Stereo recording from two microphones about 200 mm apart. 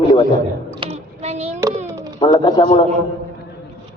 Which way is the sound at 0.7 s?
30° right (ahead or behind).